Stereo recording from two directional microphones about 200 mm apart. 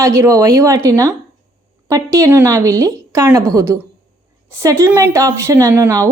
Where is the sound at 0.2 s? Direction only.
15° right (ahead or behind).